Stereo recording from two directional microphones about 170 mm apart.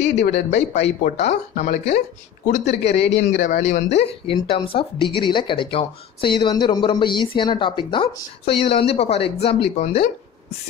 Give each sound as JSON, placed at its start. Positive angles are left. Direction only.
{"t": 0.5, "sound": "a woman's voice", "side_deg": 40}